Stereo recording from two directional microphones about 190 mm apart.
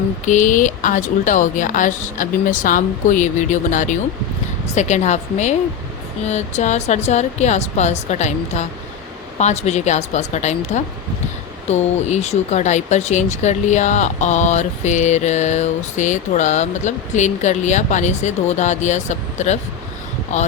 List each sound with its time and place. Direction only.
0.3 s speech: 40° left (ahead or behind)